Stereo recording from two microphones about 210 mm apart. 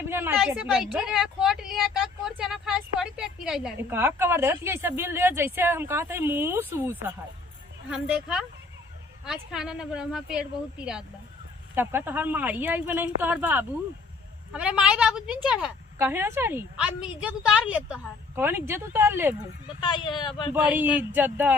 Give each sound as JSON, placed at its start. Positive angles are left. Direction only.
{"t": 0.0, "sound": "a sound", "side_deg": -10}
{"t": 0.3, "sound": "a woman's voice", "side_deg": -5}
{"t": 19.8, "sound": "speech", "side_deg": 25}
{"t": 20.5, "sound": "speech", "side_deg": -10}